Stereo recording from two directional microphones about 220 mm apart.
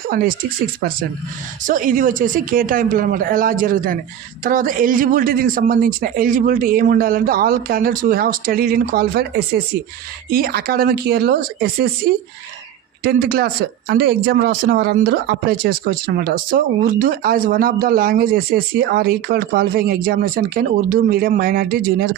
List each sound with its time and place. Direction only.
0.1 s speech: 40° right (ahead or behind)
13.0 s speech: 45° right (ahead or behind)